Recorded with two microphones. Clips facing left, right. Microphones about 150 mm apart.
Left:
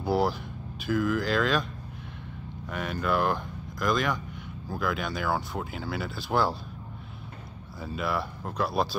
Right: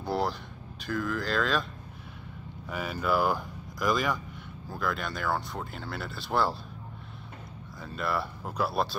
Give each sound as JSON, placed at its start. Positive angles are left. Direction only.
{"t": 0.0, "sound": "speech", "side_deg": 5}
{"t": 2.7, "sound": "speech", "side_deg": -5}
{"t": 7.8, "sound": "speech", "side_deg": 5}